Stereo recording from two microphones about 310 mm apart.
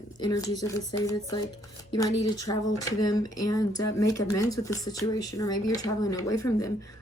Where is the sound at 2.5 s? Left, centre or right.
Centre.